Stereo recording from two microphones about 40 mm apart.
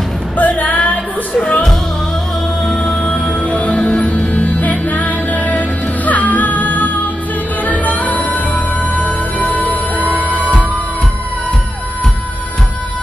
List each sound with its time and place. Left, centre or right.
0.4 s music: left
3.2 s music: left